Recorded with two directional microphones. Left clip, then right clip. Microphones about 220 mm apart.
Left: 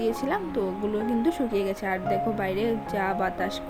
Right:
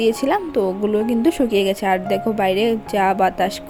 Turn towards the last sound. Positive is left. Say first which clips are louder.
# right 10 dB
turn(degrees=-35)  # may be behind; listen again after turning